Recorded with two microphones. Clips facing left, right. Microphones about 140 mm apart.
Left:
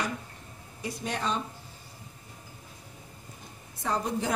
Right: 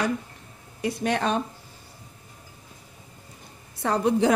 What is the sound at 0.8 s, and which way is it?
Speech, 70° right (ahead or behind).